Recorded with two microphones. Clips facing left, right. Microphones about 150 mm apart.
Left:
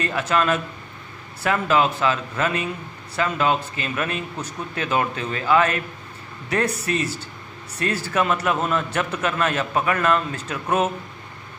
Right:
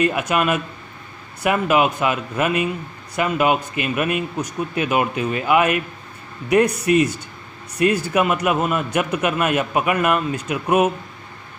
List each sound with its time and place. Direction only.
0.0 s a man's voice: 15° right (ahead or behind)